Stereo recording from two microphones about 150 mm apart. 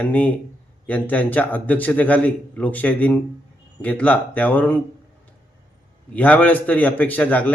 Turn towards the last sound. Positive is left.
turn(degrees=10)  # may be behind; listen again after turning